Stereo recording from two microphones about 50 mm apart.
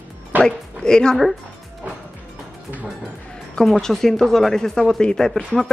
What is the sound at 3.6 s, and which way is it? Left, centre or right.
Speech, centre.